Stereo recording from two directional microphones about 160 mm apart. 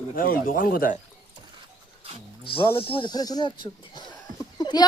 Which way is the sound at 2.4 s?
35° left (ahead or behind).